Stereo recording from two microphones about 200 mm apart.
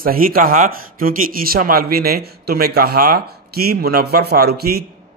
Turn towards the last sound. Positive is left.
turn(degrees=-50)  # may be behind; listen again after turning